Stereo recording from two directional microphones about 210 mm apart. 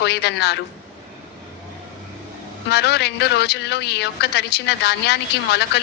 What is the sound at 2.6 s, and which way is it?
A woman's voice, 50° left (ahead or behind).